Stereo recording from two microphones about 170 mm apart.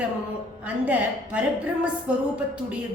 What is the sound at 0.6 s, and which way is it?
A woman's voice, 10° right (ahead or behind).